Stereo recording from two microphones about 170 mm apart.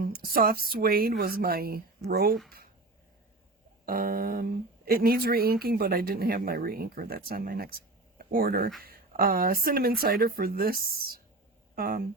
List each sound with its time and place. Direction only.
0.0 s a woman's voice: 60° right (ahead or behind)
3.8 s a woman's voice: 60° right (ahead or behind)